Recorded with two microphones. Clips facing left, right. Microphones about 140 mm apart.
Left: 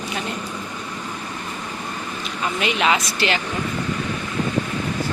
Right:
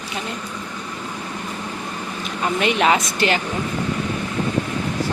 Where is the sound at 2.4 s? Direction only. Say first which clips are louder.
Right 3 dB; 50° right (ahead or behind).